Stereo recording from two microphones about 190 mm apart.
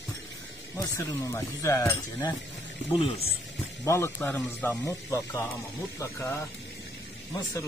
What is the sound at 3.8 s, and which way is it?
Speech, 15° left (ahead or behind).